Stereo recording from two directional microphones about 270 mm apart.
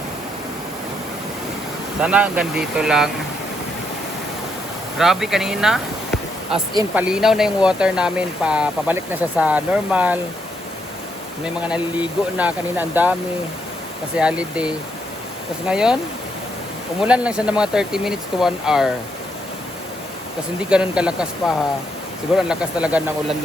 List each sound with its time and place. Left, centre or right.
2.0 s speech: centre
4.9 s speech: centre
11.4 s speech: centre
14.2 s speech: centre
17.0 s speech: centre
20.7 s speech: centre